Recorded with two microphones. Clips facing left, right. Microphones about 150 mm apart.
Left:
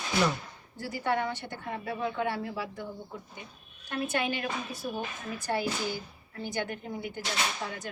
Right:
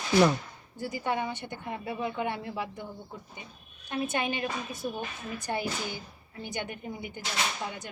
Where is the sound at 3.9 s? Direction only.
20° right (ahead or behind).